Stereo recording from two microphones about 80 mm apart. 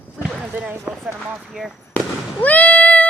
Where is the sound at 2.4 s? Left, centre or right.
Centre.